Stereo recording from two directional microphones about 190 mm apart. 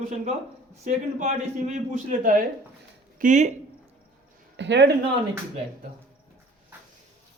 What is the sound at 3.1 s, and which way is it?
Speech, 40° right (ahead or behind).